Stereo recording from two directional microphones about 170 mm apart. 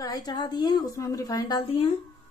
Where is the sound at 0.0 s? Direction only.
25° left (ahead or behind).